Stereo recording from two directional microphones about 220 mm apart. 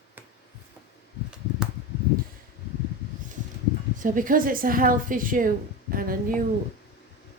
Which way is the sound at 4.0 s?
40° right (ahead or behind).